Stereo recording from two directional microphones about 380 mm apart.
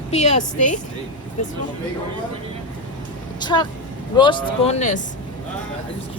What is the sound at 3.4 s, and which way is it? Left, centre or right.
Speech, centre.